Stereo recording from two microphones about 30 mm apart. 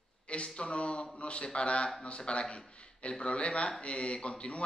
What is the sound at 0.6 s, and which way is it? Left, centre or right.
Mantra, left.